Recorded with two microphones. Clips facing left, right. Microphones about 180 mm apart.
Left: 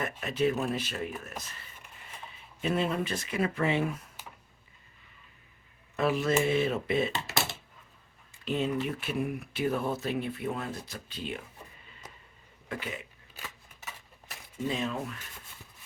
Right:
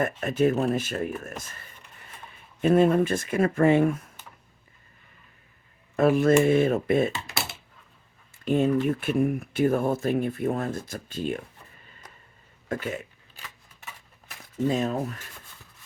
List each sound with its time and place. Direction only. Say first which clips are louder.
0.2 s speech: right 4 dB; 50° right (ahead or behind)
6.0 s speech: right 8 dB; 50° right (ahead or behind)
8.4 s speech: right 8 dB; 50° right (ahead or behind)
12.6 s speech: right 7 dB; 45° right (ahead or behind)
14.6 s speech: right 7 dB; 45° right (ahead or behind)